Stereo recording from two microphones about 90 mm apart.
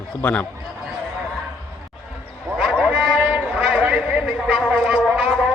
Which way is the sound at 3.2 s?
15° right (ahead or behind).